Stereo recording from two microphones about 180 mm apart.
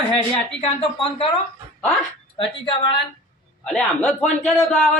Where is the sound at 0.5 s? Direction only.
30° left (ahead or behind).